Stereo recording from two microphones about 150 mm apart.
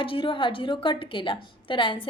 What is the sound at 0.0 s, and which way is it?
A woman's voice, 35° left (ahead or behind).